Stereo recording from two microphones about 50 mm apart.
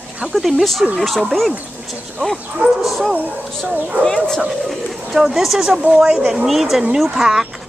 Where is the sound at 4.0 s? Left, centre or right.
Centre.